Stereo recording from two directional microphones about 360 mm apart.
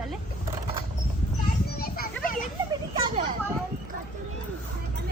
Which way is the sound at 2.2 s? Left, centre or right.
Left.